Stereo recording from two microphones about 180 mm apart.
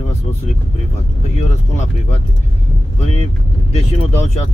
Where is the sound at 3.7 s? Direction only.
40° left (ahead or behind).